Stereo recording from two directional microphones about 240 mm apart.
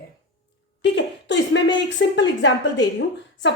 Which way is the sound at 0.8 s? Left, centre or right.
Left.